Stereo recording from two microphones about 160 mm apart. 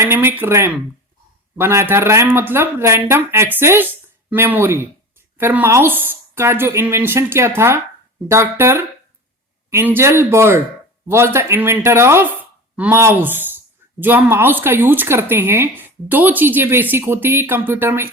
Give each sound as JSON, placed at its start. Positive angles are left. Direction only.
{"t": 0.0, "sound": "speech", "side_deg": -15}